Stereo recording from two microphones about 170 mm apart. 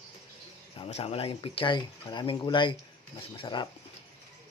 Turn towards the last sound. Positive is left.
turn(degrees=25)  # may be behind; listen again after turning